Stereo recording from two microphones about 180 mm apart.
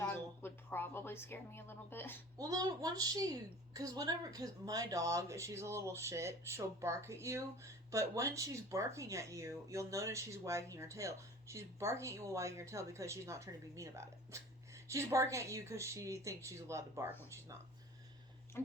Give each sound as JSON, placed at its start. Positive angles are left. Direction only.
{"t": 0.1, "sound": "a woman's voice", "side_deg": 10}
{"t": 2.4, "sound": "a woman's voice", "side_deg": -20}
{"t": 18.5, "sound": "speech", "side_deg": 15}